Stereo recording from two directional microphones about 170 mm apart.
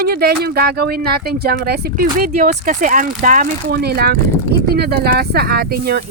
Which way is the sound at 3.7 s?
65° right (ahead or behind).